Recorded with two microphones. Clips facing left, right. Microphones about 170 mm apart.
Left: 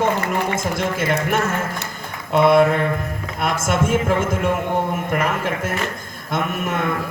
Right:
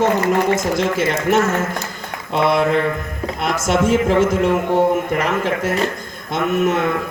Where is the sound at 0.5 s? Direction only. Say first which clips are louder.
Right 4 dB; 55° left (ahead or behind).